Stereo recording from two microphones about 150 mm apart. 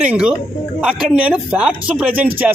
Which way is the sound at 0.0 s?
10° right (ahead or behind).